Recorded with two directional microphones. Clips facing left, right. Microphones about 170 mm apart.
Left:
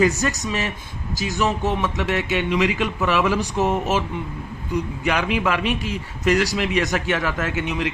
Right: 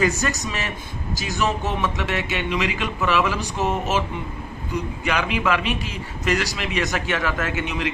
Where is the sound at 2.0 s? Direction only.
40° left (ahead or behind).